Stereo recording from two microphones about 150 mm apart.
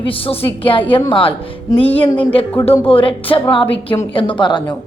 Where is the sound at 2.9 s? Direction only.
35° left (ahead or behind).